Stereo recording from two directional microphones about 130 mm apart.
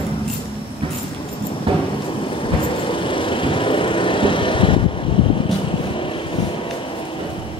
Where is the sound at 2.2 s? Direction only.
40° left (ahead or behind).